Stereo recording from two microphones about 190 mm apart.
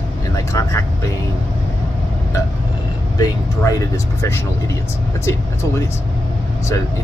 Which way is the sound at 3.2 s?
15° left (ahead or behind).